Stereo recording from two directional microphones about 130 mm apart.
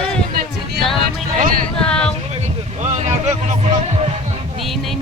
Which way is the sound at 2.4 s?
60° right (ahead or behind).